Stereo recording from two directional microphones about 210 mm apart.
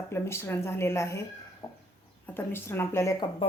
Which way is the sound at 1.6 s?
25° left (ahead or behind).